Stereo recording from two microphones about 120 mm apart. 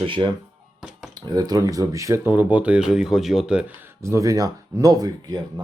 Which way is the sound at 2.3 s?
10° right (ahead or behind).